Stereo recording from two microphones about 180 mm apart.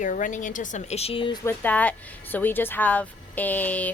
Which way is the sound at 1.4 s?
10° left (ahead or behind).